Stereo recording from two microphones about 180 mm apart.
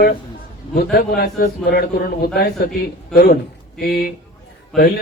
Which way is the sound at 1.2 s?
60° left (ahead or behind).